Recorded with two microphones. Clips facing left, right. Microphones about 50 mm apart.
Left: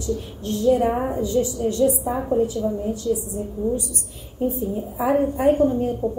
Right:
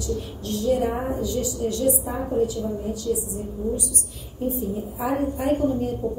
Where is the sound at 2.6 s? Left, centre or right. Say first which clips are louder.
Left 4 dB; centre.